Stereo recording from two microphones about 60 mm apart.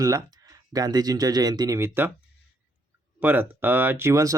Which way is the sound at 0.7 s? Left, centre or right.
Right.